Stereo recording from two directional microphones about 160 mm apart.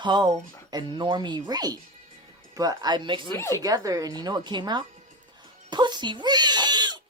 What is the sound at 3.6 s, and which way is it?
Speech, 20° right (ahead or behind).